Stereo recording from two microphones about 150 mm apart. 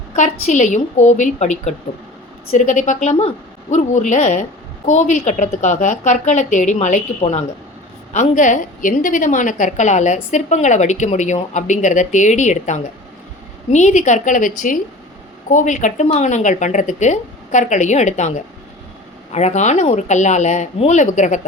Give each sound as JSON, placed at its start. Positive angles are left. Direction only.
{"t": 0.2, "sound": "a woman's voice", "side_deg": 55}